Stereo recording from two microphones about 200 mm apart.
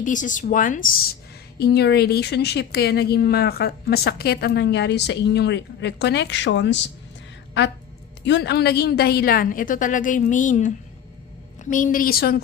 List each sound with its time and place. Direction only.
0.0 s speech: 40° left (ahead or behind); by 6.7 s 65° left (ahead or behind)
8.2 s a woman's voice: 60° left (ahead or behind)